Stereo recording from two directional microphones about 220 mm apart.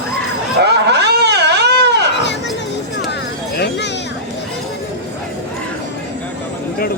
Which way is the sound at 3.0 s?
50° left (ahead or behind).